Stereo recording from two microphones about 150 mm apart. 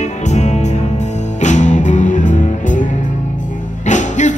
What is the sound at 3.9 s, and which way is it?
Music, 55° left (ahead or behind).